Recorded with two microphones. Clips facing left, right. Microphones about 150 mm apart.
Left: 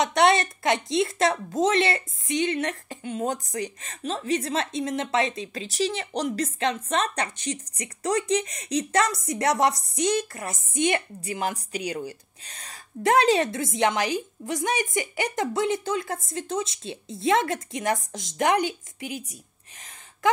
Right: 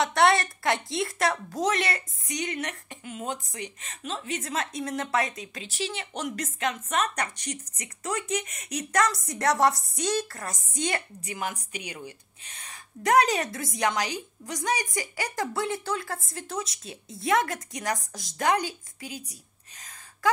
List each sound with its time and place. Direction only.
0.0 s a woman's voice: 20° left (ahead or behind)